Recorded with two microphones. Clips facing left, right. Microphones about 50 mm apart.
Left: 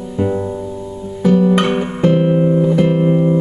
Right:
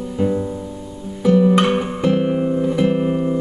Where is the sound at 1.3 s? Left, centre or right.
Centre.